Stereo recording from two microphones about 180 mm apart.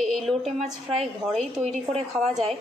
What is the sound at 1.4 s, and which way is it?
Speech, 35° right (ahead or behind).